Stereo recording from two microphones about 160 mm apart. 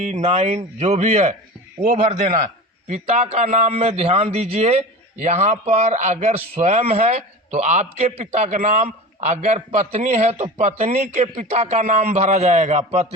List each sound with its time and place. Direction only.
0.0 s a man's voice: 45° right (ahead or behind)